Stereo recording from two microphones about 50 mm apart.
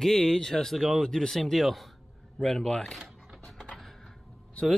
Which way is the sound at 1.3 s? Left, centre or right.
Centre.